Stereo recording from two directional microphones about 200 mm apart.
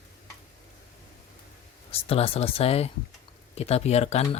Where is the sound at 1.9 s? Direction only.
30° left (ahead or behind).